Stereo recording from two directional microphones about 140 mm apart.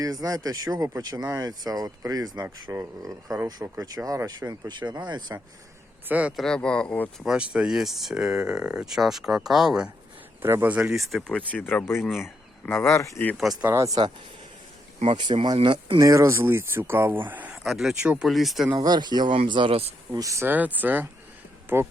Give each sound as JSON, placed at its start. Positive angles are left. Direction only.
{"t": 0.0, "sound": "speech", "side_deg": -25}
{"t": 6.1, "sound": "speech", "side_deg": -10}
{"t": 6.3, "sound": "speech", "side_deg": 5}
{"t": 7.3, "sound": "speech", "side_deg": -5}
{"t": 10.4, "sound": "speech", "side_deg": -15}
{"t": 12.0, "sound": "speech", "side_deg": 0}
{"t": 12.6, "sound": "speech", "side_deg": 15}
{"t": 13.3, "sound": "speech", "side_deg": 0}
{"t": 13.7, "sound": "speech", "side_deg": -20}
{"t": 15.1, "sound": "speech", "side_deg": -35}
{"t": 16.0, "sound": "speech", "side_deg": -20}
{"t": 18.7, "sound": "speech", "side_deg": -30}
{"t": 20.1, "sound": "speech", "side_deg": -25}